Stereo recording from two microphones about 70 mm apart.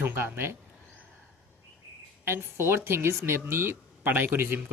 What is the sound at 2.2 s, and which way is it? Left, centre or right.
Speech, right.